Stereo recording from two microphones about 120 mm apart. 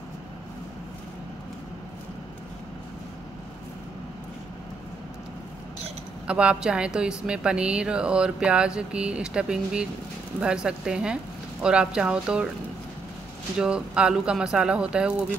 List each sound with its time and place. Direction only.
6.2 s mantra: 10° right (ahead or behind)
13.6 s mantra: 5° right (ahead or behind)